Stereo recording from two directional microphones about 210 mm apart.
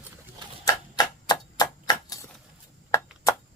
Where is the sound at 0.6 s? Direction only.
20° left (ahead or behind).